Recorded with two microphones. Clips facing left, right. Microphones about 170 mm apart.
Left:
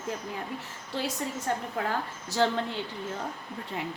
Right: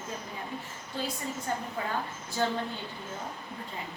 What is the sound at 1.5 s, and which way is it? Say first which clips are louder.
A woman's voice: left 3 dB; 70° left (ahead or behind).